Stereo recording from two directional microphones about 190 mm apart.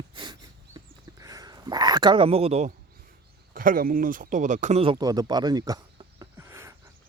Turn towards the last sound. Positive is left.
turn(degrees=-15)  # may be behind; listen again after turning